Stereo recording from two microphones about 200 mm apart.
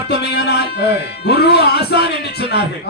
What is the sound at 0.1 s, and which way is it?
Speech, 60° left (ahead or behind).